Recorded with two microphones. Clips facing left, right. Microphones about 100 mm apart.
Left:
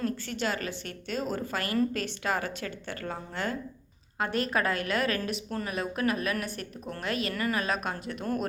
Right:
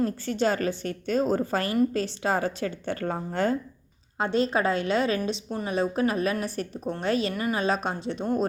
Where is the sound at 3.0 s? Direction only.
40° right (ahead or behind).